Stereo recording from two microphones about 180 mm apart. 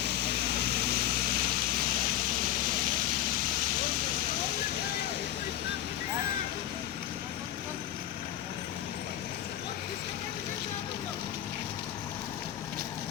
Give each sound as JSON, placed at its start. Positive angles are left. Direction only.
{"t": 0.6, "sound": "vehicle", "side_deg": -60}